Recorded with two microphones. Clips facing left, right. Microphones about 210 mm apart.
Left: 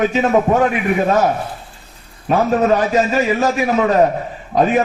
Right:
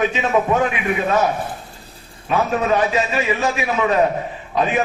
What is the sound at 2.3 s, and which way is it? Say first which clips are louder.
A man's voice: left 4 dB; 45° left (ahead or behind).